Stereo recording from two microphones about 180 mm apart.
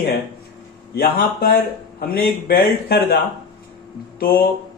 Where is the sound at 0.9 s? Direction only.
55° left (ahead or behind).